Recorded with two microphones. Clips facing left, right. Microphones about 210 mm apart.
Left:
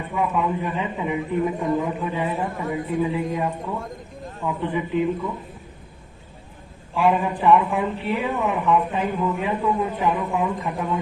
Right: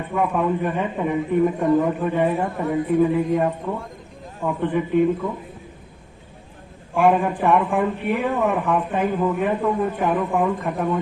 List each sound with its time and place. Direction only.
0.1 s a woman's voice: 55° right (ahead or behind)
6.9 s a woman's voice: 50° right (ahead or behind)